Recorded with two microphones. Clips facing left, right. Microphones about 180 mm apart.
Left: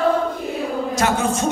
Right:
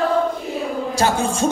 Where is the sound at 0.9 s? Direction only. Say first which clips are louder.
Right 1 dB; 30° right (ahead or behind).